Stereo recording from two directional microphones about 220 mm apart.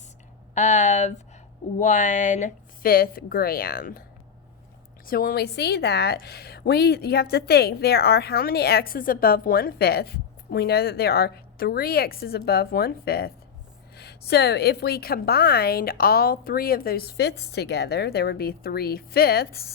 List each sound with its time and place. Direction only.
0.5 s speech: 35° left (ahead or behind)
5.0 s a woman's voice: 40° left (ahead or behind)